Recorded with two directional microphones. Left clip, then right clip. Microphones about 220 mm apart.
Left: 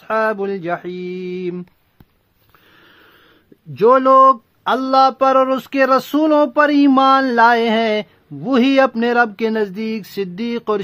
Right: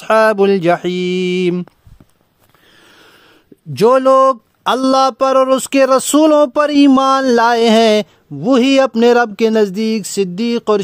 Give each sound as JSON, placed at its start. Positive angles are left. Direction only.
{"t": 0.0, "sound": "speech", "side_deg": -50}
{"t": 2.8, "sound": "a sound", "side_deg": -30}
{"t": 3.7, "sound": "speech", "side_deg": -40}